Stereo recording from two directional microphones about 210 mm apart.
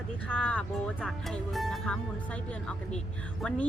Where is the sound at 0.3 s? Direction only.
5° left (ahead or behind).